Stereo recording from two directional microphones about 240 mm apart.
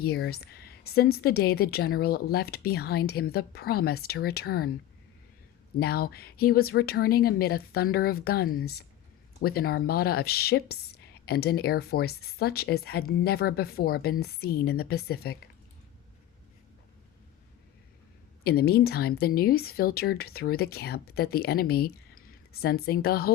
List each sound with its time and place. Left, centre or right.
0.0 s speech: left
5.8 s speech: left
18.4 s speech: left